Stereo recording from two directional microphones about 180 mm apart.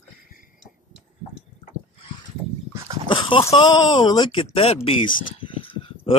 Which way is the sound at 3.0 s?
30° left (ahead or behind).